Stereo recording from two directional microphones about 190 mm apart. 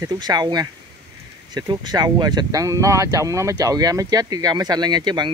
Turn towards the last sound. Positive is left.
turn(degrees=-25)  # may be behind; listen again after turning